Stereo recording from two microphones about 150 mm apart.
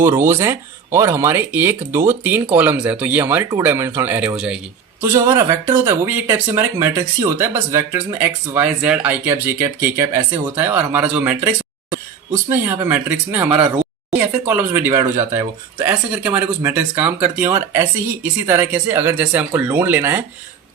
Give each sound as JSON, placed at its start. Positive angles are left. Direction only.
{"t": 0.0, "sound": "speech", "side_deg": -15}
{"t": 4.9, "sound": "speech", "side_deg": -15}
{"t": 5.4, "sound": "speech", "side_deg": -30}
{"t": 5.7, "sound": "speech", "side_deg": -15}